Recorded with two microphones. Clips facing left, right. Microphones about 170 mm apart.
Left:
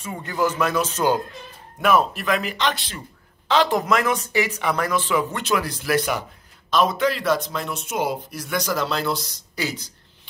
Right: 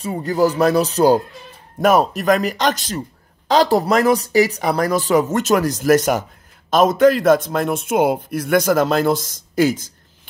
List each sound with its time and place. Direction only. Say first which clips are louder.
0.0 s speech: right 7 dB; 35° right (ahead or behind)